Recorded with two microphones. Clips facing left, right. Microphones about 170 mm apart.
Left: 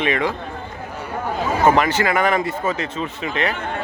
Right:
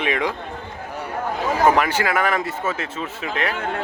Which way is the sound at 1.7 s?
10° right (ahead or behind).